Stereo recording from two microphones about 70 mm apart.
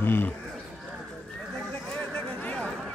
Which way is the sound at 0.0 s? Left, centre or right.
Left.